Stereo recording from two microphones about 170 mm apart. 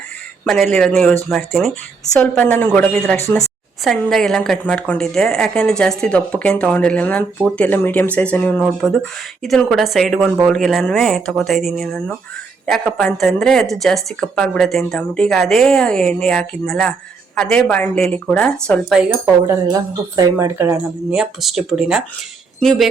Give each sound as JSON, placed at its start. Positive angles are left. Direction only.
{"t": 0.4, "sound": "a woman's voice", "side_deg": 0}
{"t": 3.8, "sound": "a woman's voice", "side_deg": 5}
{"t": 19.2, "sound": "a woman's voice", "side_deg": -15}